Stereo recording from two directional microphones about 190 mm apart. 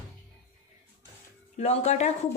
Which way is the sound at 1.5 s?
35° left (ahead or behind).